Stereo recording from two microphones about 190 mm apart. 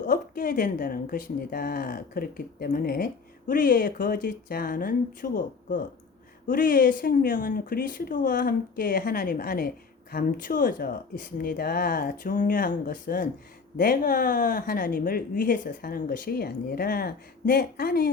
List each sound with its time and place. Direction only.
0.0 s speech: 45° left (ahead or behind)